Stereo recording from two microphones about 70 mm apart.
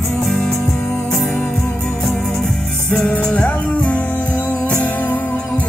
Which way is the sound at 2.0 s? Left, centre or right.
Centre.